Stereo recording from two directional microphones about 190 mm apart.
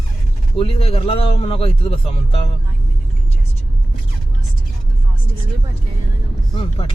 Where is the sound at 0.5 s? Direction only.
30° left (ahead or behind).